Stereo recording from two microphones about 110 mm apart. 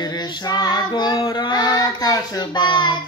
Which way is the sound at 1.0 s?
60° left (ahead or behind).